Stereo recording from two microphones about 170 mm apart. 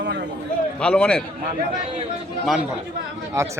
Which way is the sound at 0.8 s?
5° left (ahead or behind).